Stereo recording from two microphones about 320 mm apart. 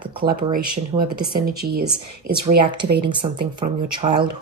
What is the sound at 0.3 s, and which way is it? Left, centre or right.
Speech, right.